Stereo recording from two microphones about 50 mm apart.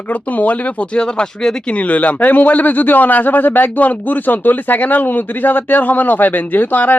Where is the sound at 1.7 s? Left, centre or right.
Left.